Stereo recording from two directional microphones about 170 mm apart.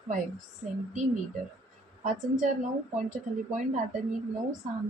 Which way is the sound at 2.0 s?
50° right (ahead or behind).